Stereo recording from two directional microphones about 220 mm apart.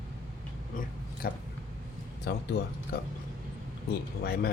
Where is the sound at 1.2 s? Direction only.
45° left (ahead or behind).